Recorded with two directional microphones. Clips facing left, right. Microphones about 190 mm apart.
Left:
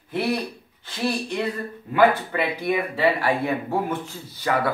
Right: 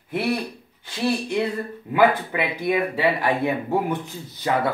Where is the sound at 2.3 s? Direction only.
15° right (ahead or behind).